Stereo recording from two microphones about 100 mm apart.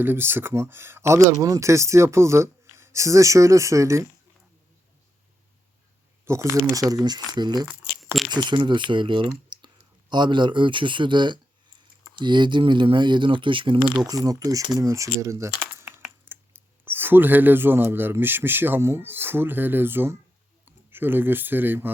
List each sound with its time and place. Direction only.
0.0 s speech: 20° right (ahead or behind)
6.2 s speech: 30° right (ahead or behind); by 7.7 s 45° right (ahead or behind)
8.0 s a sound: centre (ahead or behind)
8.3 s speech: 50° right (ahead or behind)
14.3 s speech: 35° right (ahead or behind); by 21.9 s 20° right (ahead or behind)